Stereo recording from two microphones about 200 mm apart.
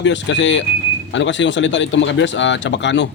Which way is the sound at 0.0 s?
65° left (ahead or behind).